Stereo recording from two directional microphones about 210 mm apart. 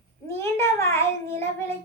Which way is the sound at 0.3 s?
10° left (ahead or behind).